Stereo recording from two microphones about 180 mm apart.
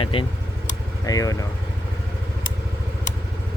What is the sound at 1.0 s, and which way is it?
Speech, 20° left (ahead or behind).